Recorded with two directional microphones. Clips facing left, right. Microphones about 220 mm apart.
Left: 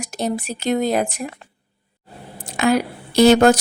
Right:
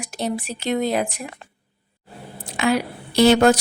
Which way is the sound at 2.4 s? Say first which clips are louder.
Left 3 dB; 45° left (ahead or behind).